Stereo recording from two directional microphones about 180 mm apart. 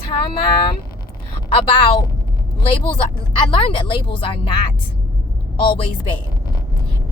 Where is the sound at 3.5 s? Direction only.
30° left (ahead or behind).